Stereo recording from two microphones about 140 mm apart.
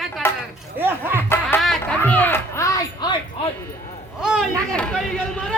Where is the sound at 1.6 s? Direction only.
5° left (ahead or behind).